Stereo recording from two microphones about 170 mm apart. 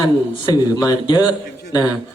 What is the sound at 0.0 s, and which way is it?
A man's voice, 25° left (ahead or behind).